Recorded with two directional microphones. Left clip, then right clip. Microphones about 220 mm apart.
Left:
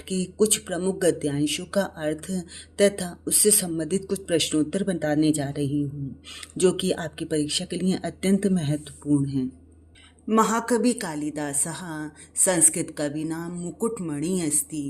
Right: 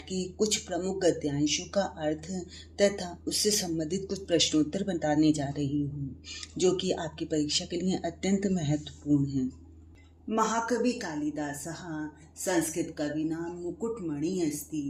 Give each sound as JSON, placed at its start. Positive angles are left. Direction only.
{"t": 0.1, "sound": "speech", "side_deg": 30}
{"t": 10.2, "sound": "speech", "side_deg": 50}